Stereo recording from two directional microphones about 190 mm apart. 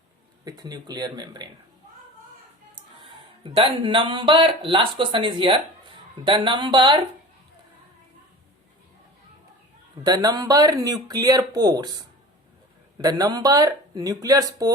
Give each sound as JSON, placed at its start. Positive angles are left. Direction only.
{"t": 0.4, "sound": "speech", "side_deg": -20}
{"t": 3.4, "sound": "speech", "side_deg": -25}
{"t": 10.0, "sound": "speech", "side_deg": -20}